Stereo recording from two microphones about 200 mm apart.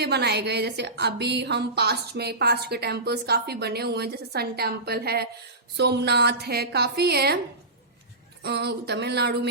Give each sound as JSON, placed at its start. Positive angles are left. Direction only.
{"t": 0.0, "sound": "a woman's voice", "side_deg": -55}
{"t": 8.4, "sound": "speech", "side_deg": -55}